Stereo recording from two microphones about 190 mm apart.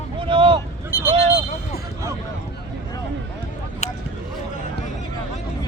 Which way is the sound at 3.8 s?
35° left (ahead or behind).